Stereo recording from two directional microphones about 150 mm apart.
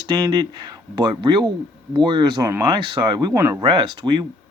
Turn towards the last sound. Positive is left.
turn(degrees=-30)  # may be behind; listen again after turning